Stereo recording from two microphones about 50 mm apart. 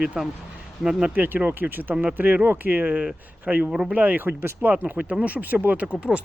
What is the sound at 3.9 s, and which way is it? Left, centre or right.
Speech, right.